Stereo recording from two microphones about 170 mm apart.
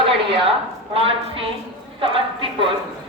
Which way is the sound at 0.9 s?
35° right (ahead or behind).